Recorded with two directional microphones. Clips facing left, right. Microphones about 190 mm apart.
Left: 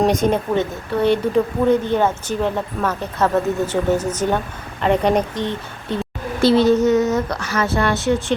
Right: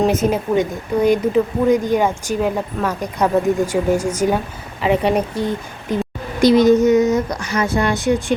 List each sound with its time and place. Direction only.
0.0 s speech: 5° right (ahead or behind)